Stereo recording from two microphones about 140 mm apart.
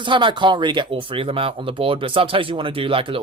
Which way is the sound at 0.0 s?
35° right (ahead or behind).